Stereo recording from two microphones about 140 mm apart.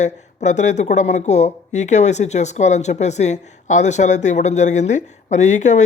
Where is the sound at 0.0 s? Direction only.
60° left (ahead or behind).